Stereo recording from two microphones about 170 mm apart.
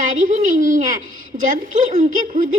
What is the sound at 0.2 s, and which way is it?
Speech, 50° right (ahead or behind).